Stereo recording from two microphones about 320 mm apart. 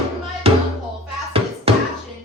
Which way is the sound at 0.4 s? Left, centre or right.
Centre.